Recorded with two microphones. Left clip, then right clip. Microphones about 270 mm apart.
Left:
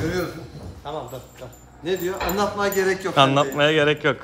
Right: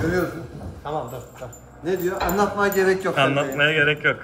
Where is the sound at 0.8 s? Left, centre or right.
Right.